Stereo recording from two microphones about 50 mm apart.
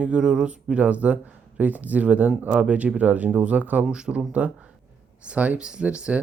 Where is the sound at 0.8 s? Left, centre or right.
Right.